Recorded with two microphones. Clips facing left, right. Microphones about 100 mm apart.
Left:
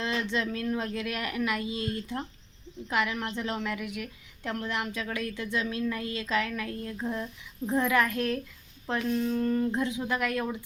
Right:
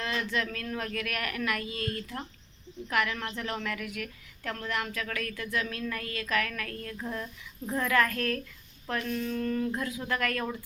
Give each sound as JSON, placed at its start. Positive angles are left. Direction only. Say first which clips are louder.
{"t": 0.0, "sound": "a woman's voice", "louder": "left 2 dB", "side_deg": 25}